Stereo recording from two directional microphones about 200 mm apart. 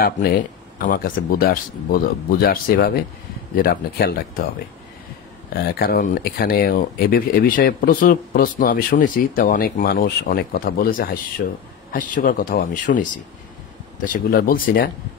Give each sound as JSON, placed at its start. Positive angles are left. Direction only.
{"t": 0.0, "sound": "speech", "side_deg": 50}
{"t": 5.5, "sound": "speech", "side_deg": 50}